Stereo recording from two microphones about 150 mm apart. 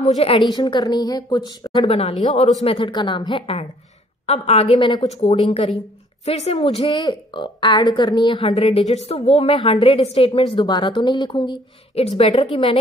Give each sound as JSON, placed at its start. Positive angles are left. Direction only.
{"t": 0.0, "sound": "a woman's voice", "side_deg": 40}
{"t": 5.0, "sound": "a woman's voice", "side_deg": 45}